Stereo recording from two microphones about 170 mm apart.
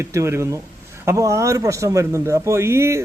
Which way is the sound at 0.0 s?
15° right (ahead or behind).